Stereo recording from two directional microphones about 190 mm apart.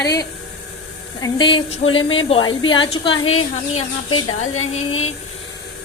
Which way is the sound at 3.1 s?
90° left.